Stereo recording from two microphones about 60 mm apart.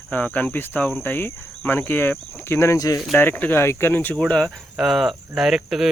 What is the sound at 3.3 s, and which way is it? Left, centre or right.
Speech, left.